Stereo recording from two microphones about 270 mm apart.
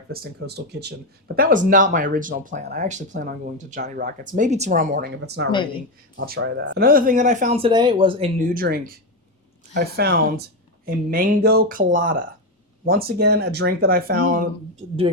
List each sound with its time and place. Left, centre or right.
0.1 s speech: right